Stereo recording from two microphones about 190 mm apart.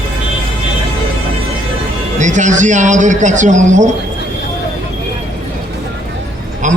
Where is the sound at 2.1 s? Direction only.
40° right (ahead or behind).